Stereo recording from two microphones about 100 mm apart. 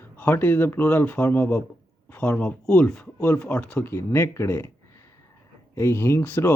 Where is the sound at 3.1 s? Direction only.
25° left (ahead or behind).